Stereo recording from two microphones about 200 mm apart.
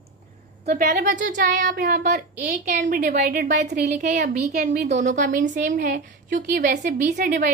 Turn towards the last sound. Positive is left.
turn(degrees=-40)  # may be behind; listen again after turning